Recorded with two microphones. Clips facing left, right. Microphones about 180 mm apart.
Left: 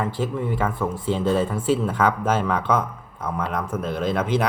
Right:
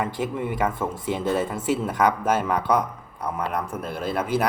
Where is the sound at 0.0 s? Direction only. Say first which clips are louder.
Left 1 dB; 15° right (ahead or behind).